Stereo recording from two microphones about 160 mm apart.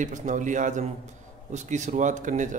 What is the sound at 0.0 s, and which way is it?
Speech, 50° right (ahead or behind).